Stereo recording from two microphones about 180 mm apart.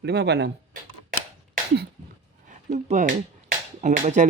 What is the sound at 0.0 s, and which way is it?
Speech, 70° right (ahead or behind).